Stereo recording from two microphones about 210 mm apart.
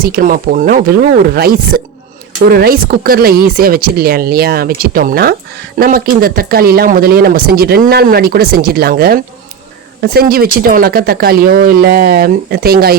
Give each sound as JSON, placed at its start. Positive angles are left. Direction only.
{"t": 0.0, "sound": "speech", "side_deg": -45}